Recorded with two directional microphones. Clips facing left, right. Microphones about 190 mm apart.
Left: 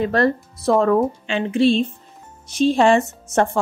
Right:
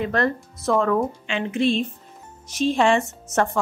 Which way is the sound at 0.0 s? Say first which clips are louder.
Left 4 dB; 35° left (ahead or behind).